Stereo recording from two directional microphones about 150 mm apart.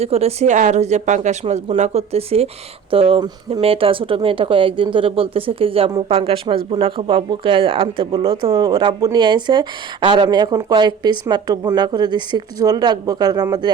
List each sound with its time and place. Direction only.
0.0 s speech: 45° right (ahead or behind); by 13.7 s 25° right (ahead or behind)